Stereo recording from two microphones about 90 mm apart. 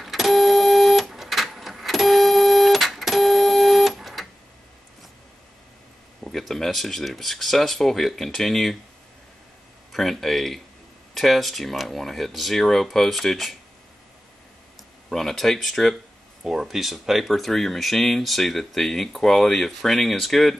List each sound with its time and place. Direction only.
0.0 s printer: centre (ahead or behind)
6.2 s speech: 5° left (ahead or behind)
9.9 s speech: centre (ahead or behind)
15.0 s speech: 5° left (ahead or behind)